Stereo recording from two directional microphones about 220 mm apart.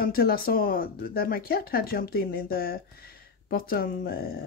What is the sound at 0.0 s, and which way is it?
Speech, 45° left (ahead or behind).